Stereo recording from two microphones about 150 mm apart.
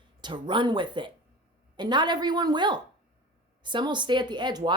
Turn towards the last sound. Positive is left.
turn(degrees=-30)  # may be behind; listen again after turning